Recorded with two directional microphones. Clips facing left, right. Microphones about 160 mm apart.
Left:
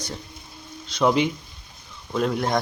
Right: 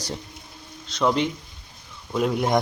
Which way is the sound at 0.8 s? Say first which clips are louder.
Left 2 dB; 5° left (ahead or behind).